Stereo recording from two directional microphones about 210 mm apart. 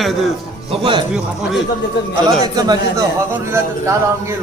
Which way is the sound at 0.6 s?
25° right (ahead or behind).